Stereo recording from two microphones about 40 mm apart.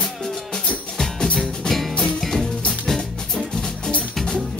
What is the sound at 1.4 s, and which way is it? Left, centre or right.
Music, centre.